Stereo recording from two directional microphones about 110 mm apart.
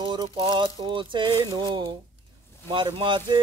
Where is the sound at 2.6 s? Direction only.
50° right (ahead or behind).